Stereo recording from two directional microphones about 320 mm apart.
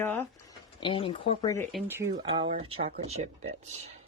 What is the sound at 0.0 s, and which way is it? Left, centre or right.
Speech, centre.